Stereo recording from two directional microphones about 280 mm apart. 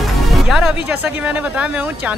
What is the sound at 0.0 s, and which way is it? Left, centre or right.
Speech, centre.